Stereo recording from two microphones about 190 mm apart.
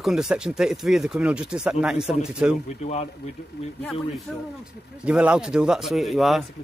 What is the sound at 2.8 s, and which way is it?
Speech, 35° left (ahead or behind).